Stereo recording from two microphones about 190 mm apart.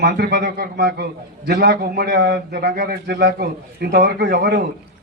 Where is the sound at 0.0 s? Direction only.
60° right (ahead or behind).